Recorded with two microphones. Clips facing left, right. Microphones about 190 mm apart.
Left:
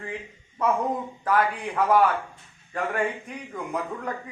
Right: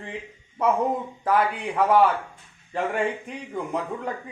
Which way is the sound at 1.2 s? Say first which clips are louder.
Right 1 dB; 25° right (ahead or behind).